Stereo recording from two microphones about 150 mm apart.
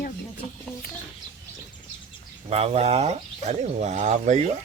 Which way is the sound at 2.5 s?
45° right (ahead or behind).